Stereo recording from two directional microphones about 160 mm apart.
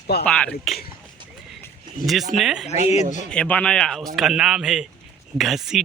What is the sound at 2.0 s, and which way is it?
Speech, centre (ahead or behind).